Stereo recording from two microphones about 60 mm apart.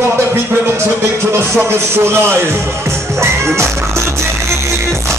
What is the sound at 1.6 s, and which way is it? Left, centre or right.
Speech, right.